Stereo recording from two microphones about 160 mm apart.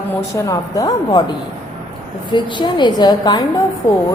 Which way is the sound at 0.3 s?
20° left (ahead or behind).